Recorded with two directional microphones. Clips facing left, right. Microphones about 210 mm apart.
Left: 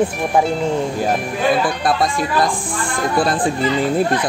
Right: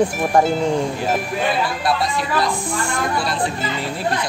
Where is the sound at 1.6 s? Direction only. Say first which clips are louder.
Left 3 dB; 50° left (ahead or behind).